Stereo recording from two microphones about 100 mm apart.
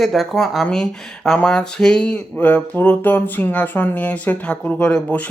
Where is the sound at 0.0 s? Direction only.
Centre (ahead or behind).